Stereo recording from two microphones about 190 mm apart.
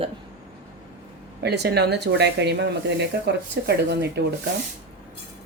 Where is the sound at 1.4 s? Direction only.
60° right (ahead or behind).